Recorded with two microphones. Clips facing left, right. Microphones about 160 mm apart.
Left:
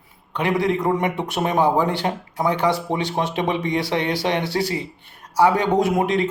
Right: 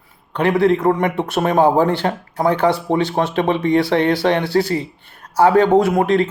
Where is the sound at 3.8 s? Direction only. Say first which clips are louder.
Right 7 dB; 55° right (ahead or behind).